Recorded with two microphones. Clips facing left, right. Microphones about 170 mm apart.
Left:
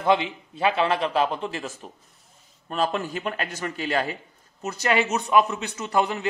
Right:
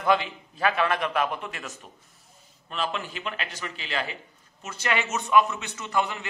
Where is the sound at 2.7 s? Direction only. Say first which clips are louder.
Left 6 dB; 45° left (ahead or behind).